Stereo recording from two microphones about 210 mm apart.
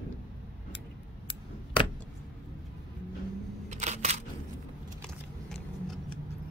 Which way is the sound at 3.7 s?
30° right (ahead or behind).